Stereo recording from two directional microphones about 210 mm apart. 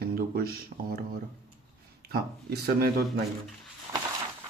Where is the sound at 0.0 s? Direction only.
45° right (ahead or behind).